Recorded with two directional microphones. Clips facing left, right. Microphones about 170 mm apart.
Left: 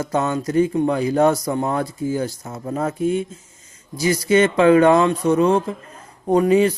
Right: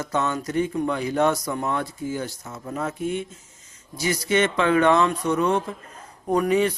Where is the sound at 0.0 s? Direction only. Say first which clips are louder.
Left 4 dB; 30° left (ahead or behind).